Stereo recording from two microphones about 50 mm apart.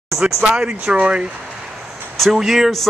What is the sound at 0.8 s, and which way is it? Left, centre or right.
Speech, right.